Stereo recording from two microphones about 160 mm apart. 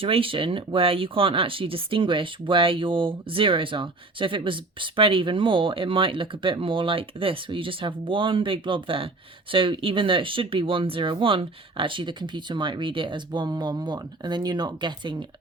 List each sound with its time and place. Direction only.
0.0 s speech: 35° right (ahead or behind)